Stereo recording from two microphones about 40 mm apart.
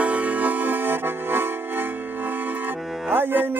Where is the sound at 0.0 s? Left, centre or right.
Right.